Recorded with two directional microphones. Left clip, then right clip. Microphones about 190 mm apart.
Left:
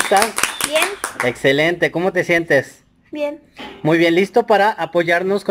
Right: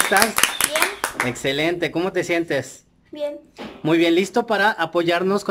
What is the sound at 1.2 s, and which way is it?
Speech, centre (ahead or behind).